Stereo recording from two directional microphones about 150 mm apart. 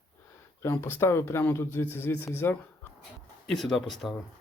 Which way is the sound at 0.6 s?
15° left (ahead or behind).